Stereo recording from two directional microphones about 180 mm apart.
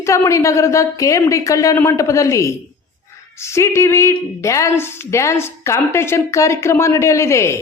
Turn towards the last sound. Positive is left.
turn(degrees=15)  # may be behind; listen again after turning